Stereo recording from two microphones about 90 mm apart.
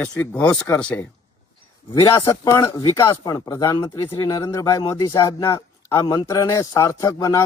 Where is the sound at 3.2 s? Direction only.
45° left (ahead or behind).